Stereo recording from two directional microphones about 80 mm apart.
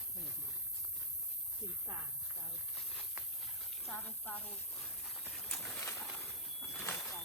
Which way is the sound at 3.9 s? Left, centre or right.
Centre.